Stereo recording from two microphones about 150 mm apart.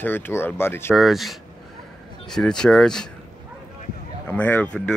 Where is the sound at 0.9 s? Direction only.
Centre (ahead or behind).